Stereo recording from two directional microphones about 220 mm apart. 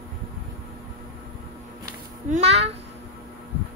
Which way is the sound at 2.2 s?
30° right (ahead or behind).